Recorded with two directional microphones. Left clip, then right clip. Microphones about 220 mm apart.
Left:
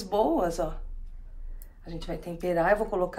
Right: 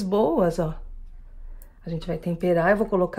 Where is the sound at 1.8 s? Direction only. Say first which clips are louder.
Right 6 dB; 45° right (ahead or behind).